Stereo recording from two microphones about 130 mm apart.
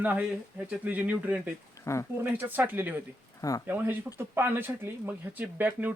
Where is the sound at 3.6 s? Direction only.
15° right (ahead or behind).